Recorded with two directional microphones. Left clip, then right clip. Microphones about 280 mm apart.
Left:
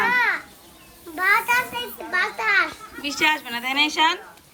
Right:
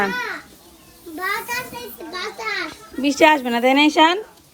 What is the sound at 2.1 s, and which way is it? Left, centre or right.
Speech, centre.